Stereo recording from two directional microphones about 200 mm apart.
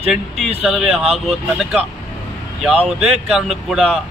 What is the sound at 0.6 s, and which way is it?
Speech, centre (ahead or behind).